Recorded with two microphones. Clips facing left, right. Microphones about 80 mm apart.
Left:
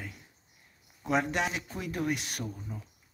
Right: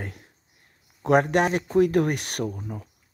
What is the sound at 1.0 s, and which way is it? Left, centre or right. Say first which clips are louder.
Speech: right 9 dB; right.